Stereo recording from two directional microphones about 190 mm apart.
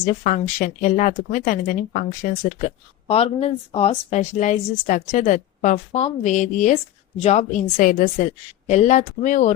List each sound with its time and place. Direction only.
0.0 s speech: 40° left (ahead or behind)